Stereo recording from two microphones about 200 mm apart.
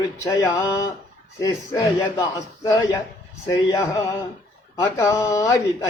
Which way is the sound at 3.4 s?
20° left (ahead or behind).